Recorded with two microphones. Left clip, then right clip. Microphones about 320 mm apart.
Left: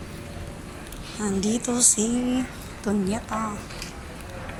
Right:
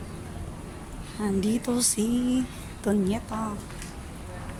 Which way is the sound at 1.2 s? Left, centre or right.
Centre.